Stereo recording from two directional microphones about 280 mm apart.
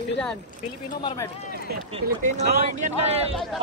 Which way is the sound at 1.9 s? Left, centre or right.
Right.